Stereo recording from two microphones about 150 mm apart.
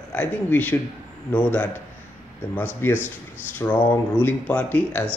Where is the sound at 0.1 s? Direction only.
10° left (ahead or behind).